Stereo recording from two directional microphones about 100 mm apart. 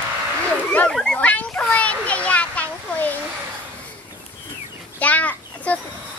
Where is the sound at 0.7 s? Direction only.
10° left (ahead or behind).